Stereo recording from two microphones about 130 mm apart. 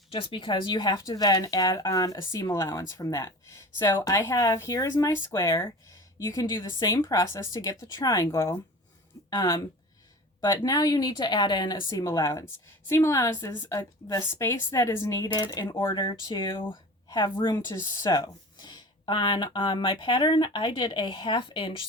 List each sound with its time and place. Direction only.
0.1 s speech: 40° left (ahead or behind)
10.6 s speech: 30° left (ahead or behind)
16.0 s speech: 40° left (ahead or behind)